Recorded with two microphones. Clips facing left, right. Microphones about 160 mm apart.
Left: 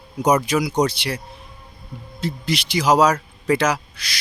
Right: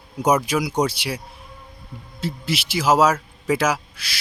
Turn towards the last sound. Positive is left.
turn(degrees=-5)  # may be behind; listen again after turning